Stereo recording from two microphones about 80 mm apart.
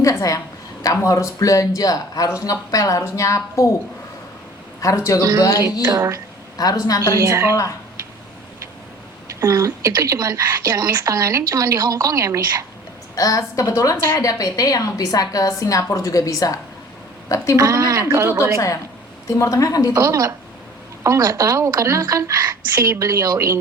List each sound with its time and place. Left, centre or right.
0.0 s a woman's voice: left
4.8 s a woman's voice: left
5.9 s a woman's voice: right
6.6 s a woman's voice: left
7.2 s a woman's voice: right
9.4 s a woman's voice: right
13.1 s a woman's voice: left
13.9 s a woman's voice: left
14.2 s a woman's voice: left
17.6 s a woman's voice: right
19.4 s a woman's voice: left
19.9 s a woman's voice: right